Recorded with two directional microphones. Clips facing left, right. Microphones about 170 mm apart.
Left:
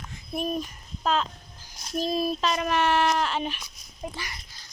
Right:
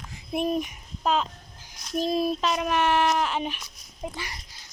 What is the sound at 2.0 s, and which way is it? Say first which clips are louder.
Child singing: right 2 dB; 20° right (ahead or behind).